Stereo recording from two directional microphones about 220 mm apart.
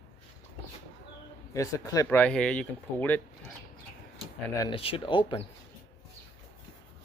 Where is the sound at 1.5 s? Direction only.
15° left (ahead or behind).